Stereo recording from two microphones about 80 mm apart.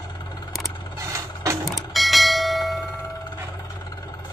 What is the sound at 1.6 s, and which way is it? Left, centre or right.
Bell, centre.